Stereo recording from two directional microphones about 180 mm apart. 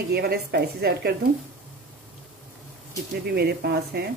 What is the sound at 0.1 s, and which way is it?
A woman's voice, 60° right (ahead or behind).